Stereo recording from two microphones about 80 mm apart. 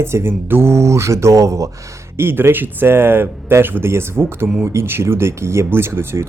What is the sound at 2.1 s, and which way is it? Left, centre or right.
A man's voice, right.